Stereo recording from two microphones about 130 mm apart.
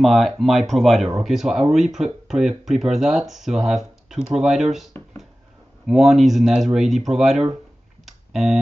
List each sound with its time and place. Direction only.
0.0 s speech: centre (ahead or behind)
5.9 s speech: 5° right (ahead or behind)
8.0 s a sound: centre (ahead or behind)